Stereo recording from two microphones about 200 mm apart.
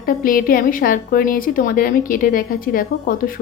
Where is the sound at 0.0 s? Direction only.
45° left (ahead or behind).